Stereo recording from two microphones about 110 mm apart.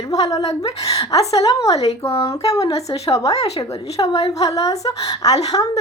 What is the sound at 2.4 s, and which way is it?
Speech, 30° left (ahead or behind).